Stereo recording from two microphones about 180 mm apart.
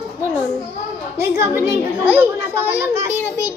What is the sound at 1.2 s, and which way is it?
A child's voice, 15° right (ahead or behind).